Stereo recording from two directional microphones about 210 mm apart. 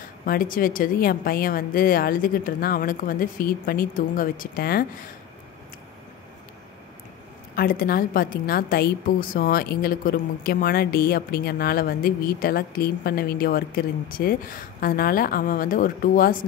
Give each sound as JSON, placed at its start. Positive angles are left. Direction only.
{"t": 0.2, "sound": "a woman's voice", "side_deg": 40}
{"t": 7.5, "sound": "a woman's voice", "side_deg": 45}